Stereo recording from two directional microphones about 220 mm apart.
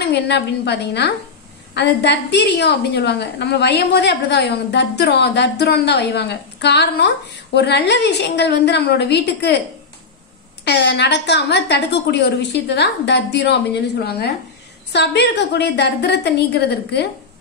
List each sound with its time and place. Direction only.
0.1 s a woman's voice: 50° left (ahead or behind)
10.6 s a woman's voice: 50° left (ahead or behind)